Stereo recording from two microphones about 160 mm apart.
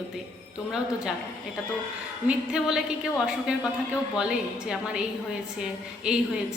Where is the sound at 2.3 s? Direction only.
5° right (ahead or behind).